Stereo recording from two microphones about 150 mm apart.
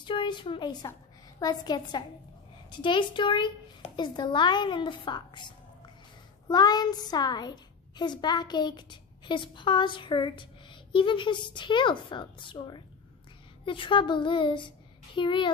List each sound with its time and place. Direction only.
0.0 s a woman's voice: 30° left (ahead or behind)